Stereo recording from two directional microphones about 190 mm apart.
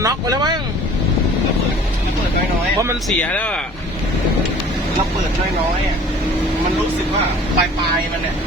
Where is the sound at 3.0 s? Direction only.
5° left (ahead or behind).